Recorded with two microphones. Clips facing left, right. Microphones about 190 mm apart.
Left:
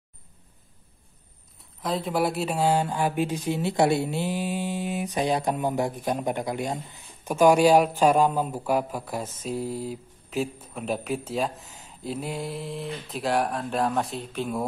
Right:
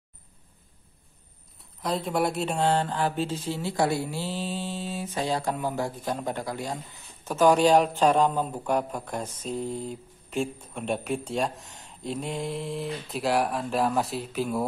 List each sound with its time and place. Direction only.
1.6 s a man's voice: centre (ahead or behind)